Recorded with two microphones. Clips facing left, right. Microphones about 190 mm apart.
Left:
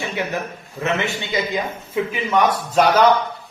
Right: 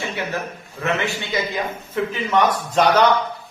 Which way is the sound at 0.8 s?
20° left (ahead or behind).